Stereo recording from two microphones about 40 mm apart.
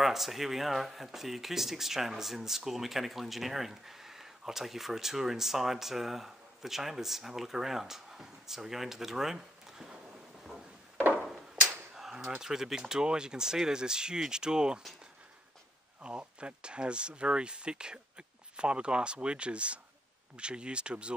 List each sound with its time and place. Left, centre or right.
0.0 s speech: centre
11.2 s a sound: centre
12.4 s speech: centre
16.0 s speech: right